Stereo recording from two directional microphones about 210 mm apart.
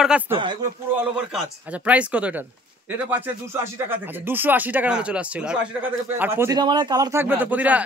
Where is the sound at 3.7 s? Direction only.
10° right (ahead or behind).